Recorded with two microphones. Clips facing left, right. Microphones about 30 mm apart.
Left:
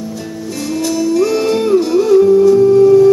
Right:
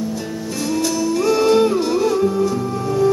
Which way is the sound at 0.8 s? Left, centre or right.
Centre.